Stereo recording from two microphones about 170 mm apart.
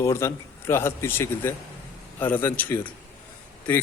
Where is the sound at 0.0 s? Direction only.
15° left (ahead or behind).